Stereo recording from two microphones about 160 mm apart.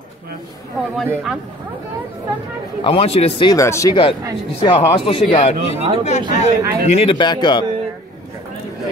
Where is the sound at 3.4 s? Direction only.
20° left (ahead or behind).